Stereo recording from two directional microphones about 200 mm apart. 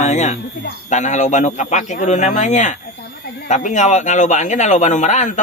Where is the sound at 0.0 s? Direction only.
35° left (ahead or behind).